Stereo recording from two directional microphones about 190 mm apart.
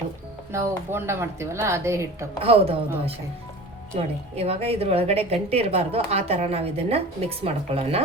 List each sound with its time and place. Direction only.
0.5 s speech: 15° right (ahead or behind)
2.4 s a woman's voice: 30° right (ahead or behind)
3.9 s a woman's voice: 35° right (ahead or behind)